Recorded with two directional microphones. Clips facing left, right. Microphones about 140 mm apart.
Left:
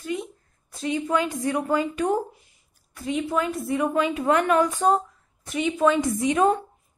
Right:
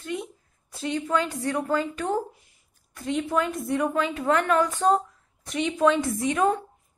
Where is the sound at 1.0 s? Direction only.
15° left (ahead or behind).